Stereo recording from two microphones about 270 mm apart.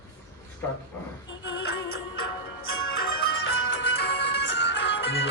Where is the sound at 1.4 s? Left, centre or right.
Left.